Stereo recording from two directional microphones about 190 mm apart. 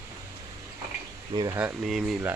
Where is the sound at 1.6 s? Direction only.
Centre (ahead or behind).